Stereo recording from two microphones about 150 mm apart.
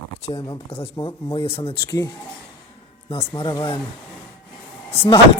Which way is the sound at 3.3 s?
35° left (ahead or behind).